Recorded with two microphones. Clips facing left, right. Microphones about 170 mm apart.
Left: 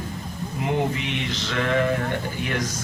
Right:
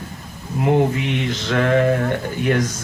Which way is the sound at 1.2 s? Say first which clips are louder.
Right 6 dB; 50° right (ahead or behind).